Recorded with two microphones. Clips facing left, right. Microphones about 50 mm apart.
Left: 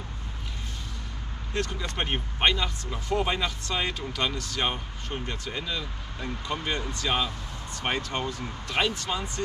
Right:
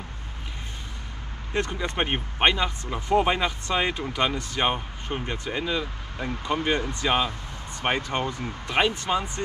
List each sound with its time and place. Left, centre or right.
1.5 s speech: right